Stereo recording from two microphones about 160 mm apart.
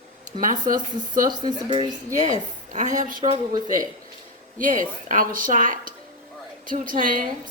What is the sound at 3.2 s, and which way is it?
Speech, 30° right (ahead or behind).